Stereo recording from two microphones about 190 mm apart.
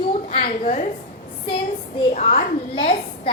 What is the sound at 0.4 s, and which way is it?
Speech, 40° left (ahead or behind).